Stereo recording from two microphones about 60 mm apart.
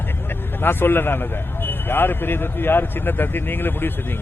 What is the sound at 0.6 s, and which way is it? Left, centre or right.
A man's voice, left.